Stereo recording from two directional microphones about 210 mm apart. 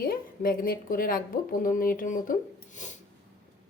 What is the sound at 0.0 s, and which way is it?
A woman's voice, 45° left (ahead or behind).